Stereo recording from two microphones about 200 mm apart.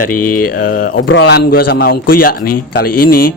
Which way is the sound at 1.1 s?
60° left (ahead or behind).